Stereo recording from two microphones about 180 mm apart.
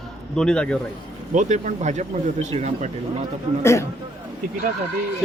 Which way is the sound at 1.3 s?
40° right (ahead or behind).